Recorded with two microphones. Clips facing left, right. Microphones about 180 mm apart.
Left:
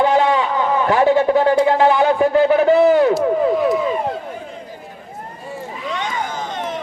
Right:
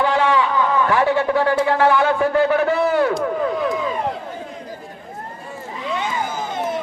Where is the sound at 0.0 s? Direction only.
20° left (ahead or behind).